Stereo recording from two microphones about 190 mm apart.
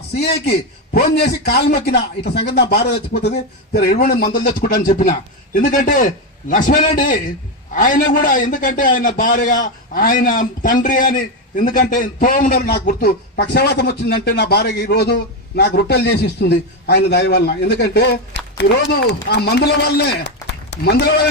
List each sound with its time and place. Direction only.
0.2 s a man's voice: 60° left (ahead or behind)